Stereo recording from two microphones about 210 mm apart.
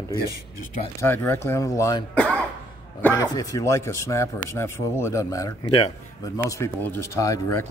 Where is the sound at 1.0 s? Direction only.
10° left (ahead or behind).